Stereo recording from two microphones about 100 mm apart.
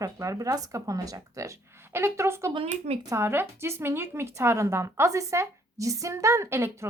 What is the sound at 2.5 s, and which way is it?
Speech, 90° right.